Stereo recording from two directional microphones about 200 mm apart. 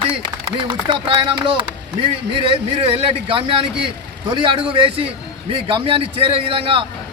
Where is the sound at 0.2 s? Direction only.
25° right (ahead or behind).